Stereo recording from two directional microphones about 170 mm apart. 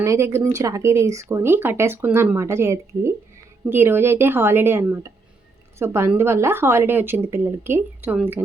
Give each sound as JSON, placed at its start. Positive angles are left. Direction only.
{"t": 0.0, "sound": "a woman's voice", "side_deg": -15}